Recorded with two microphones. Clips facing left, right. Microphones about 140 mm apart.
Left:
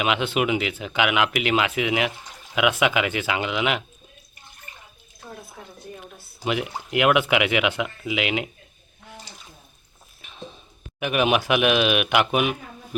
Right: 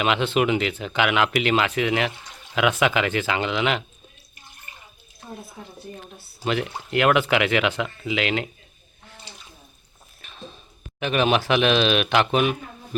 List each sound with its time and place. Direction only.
0.0 s speech: 10° left (ahead or behind)
6.4 s speech: 10° left (ahead or behind)
10.2 s a sound: 15° left (ahead or behind)
11.0 s speech: 10° left (ahead or behind)